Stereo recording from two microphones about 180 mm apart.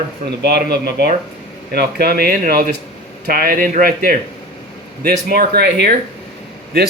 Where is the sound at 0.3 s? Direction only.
65° right (ahead or behind).